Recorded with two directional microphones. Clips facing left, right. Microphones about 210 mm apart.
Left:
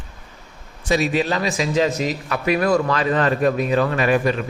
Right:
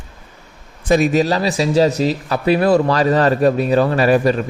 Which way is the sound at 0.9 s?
50° right (ahead or behind).